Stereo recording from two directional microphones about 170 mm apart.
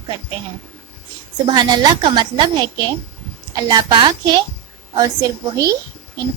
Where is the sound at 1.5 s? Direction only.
25° right (ahead or behind).